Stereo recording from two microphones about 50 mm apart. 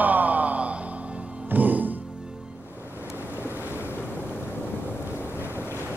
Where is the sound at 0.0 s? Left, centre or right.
Right.